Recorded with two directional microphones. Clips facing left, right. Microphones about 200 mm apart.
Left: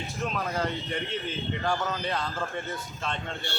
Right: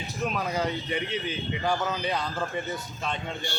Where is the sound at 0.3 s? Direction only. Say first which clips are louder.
Right 2 dB; 5° right (ahead or behind).